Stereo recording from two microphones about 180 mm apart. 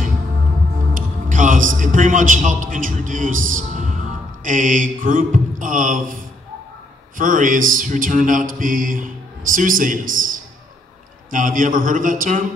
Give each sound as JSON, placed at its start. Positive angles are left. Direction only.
{"t": 0.9, "sound": "music", "side_deg": -45}
{"t": 4.5, "sound": "mantra", "side_deg": -45}
{"t": 7.2, "sound": "mantra", "side_deg": -45}
{"t": 11.2, "sound": "mantra", "side_deg": -50}